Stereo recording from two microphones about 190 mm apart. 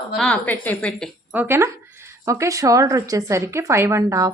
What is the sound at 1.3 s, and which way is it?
A woman's voice, 10° right (ahead or behind).